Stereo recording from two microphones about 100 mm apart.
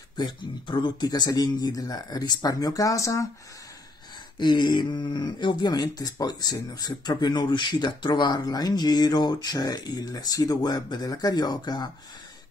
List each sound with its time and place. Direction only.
0.2 s speech: 50° left (ahead or behind); by 3.3 s 30° left (ahead or behind)
4.4 s speech: 50° left (ahead or behind)